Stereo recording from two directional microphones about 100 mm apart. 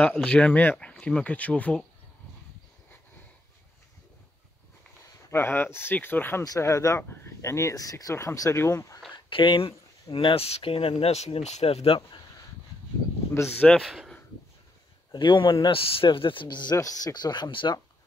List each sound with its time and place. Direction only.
0.0 s speech: 10° left (ahead or behind)
5.3 s speech: 20° left (ahead or behind)
6.4 s speech: 35° left (ahead or behind)
9.1 s speech: 55° left (ahead or behind)
10.1 s speech: 75° left (ahead or behind)
13.6 s a man's voice: 10° left (ahead or behind)
15.1 s speech: 55° left (ahead or behind)
16.7 s speech: 35° left (ahead or behind)